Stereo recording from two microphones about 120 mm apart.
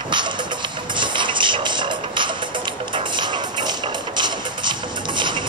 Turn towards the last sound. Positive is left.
turn(degrees=-40)  # may be behind; listen again after turning